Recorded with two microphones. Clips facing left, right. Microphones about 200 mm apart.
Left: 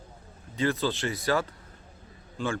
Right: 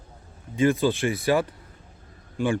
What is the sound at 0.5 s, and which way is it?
A man's voice, 15° right (ahead or behind).